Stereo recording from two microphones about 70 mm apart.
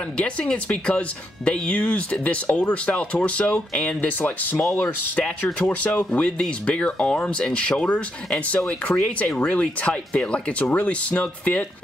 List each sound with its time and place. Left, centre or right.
0.2 s speech: centre